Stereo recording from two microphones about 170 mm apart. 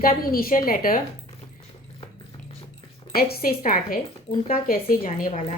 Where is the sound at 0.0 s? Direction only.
55° left (ahead or behind).